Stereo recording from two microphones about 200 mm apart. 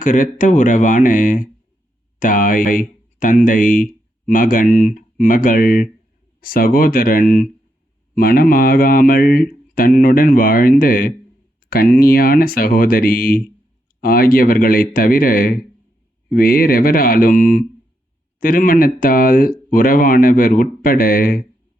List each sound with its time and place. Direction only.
0.0 s speech: 40° left (ahead or behind)